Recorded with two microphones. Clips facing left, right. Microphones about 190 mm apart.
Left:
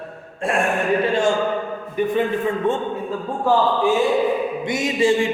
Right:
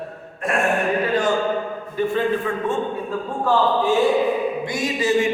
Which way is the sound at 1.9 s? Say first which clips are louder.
Left 1 dB; 15° left (ahead or behind).